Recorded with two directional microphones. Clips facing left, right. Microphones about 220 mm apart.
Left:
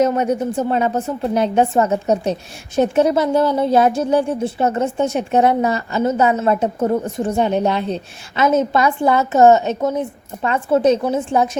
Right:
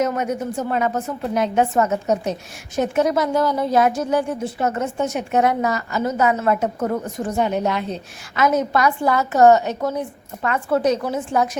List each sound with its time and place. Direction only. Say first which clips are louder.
0.0 s speech: left 5 dB; 30° left (ahead or behind)